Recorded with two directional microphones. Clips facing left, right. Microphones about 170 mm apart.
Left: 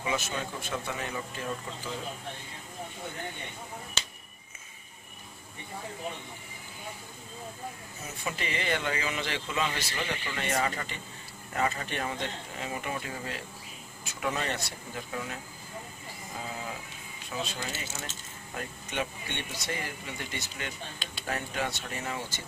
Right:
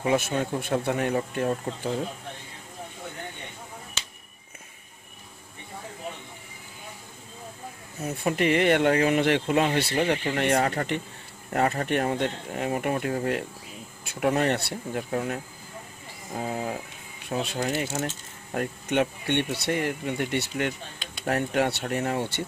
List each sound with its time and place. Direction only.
0.0 s speech: 55° right (ahead or behind)
8.0 s speech: 55° right (ahead or behind)
10.4 s speech: 65° right (ahead or behind)